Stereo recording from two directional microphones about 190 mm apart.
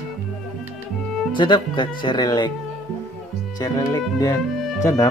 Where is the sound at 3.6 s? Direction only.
15° left (ahead or behind).